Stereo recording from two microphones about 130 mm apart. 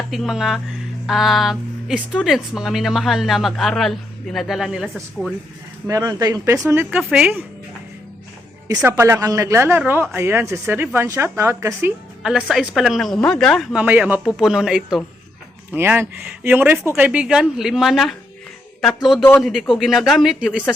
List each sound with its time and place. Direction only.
0.1 s speech: centre (ahead or behind)
5.9 s speech: 25° right (ahead or behind); by 7.4 s 10° right (ahead or behind)
8.8 s speech: 20° right (ahead or behind)
12.2 s speech: 5° right (ahead or behind)
13.7 s speech: 10° right (ahead or behind)
15.7 s speech: 15° right (ahead or behind)